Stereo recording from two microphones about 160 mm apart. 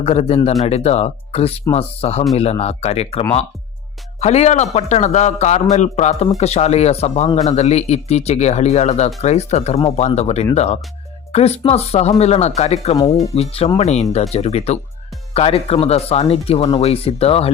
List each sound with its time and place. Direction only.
0.0 s speech: 40° left (ahead or behind)